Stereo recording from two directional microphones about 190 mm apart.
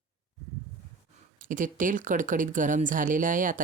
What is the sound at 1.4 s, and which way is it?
Speech, 45° right (ahead or behind).